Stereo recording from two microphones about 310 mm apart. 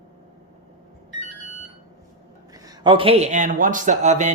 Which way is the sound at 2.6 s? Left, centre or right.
Centre.